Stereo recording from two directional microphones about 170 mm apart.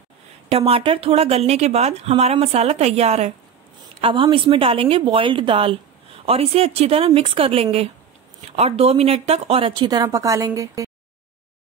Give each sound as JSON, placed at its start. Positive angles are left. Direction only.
{"t": 0.5, "sound": "speech", "side_deg": -35}